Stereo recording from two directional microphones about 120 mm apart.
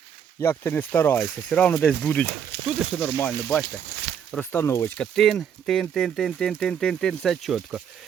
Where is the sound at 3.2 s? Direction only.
15° left (ahead or behind).